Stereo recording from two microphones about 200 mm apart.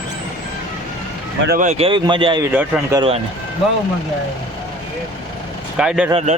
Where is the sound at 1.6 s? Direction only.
35° right (ahead or behind).